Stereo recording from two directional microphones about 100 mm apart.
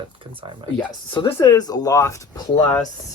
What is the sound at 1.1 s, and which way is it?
Speech, 55° left (ahead or behind).